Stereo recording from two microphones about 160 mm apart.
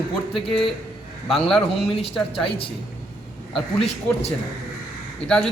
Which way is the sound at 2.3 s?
35° left (ahead or behind).